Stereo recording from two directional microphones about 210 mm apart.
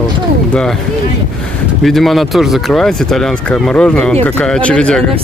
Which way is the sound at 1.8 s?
Centre (ahead or behind).